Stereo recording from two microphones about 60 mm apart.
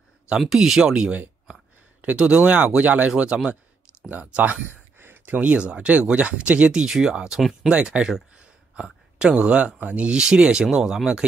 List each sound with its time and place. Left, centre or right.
0.4 s speech: centre
2.1 s speech: centre
4.9 s a sound: right
5.4 s speech: centre